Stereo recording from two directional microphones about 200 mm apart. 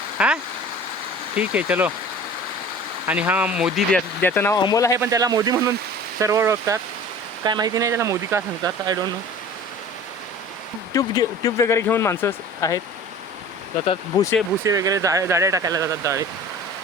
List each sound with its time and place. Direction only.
0.2 s speech: 5° right (ahead or behind)
1.4 s speech: 5° right (ahead or behind)
3.1 s speech: 10° right (ahead or behind); by 4.9 s 15° left (ahead or behind)
4.9 s speech: 15° right (ahead or behind)
10.9 s speech: 20° left (ahead or behind)
13.8 s speech: 25° left (ahead or behind)
14.6 s speech: 15° right (ahead or behind)